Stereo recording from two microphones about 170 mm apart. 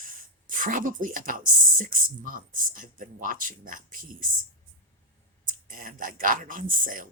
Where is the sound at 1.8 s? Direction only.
55° right (ahead or behind).